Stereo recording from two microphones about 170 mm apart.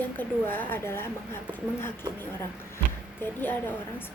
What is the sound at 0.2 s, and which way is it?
A woman's voice, 10° left (ahead or behind).